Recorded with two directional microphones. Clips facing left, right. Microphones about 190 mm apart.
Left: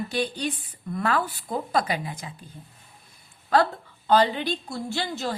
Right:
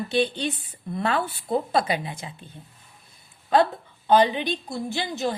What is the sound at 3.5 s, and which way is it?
A woman's voice, 20° right (ahead or behind).